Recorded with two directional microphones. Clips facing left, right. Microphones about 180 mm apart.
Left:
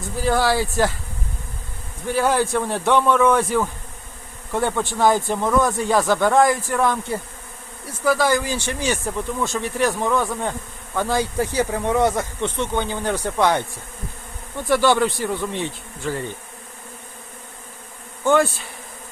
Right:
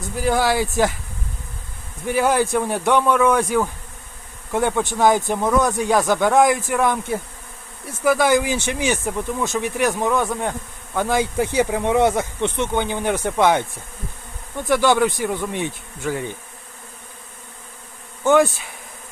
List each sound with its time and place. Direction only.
0.2 s speech: 15° right (ahead or behind)
2.0 s speech: 10° right (ahead or behind)
14.7 s speech: 15° right (ahead or behind)
18.3 s speech: 15° right (ahead or behind)